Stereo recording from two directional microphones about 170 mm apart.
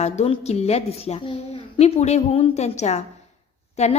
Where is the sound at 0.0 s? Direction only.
40° left (ahead or behind).